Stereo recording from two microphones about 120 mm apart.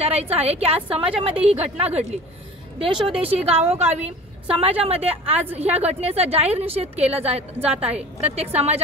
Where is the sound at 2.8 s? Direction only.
45° right (ahead or behind).